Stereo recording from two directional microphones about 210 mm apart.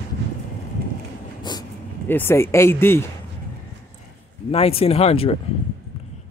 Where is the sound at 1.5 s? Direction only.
20° left (ahead or behind).